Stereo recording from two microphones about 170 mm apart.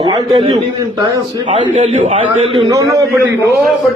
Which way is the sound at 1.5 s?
30° right (ahead or behind).